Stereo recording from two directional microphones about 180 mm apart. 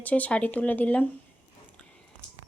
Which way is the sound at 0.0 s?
10° left (ahead or behind).